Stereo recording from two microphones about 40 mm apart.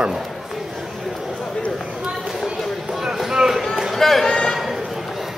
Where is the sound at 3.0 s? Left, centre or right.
Centre.